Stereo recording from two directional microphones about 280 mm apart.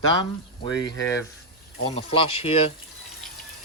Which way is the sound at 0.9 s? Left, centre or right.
Left.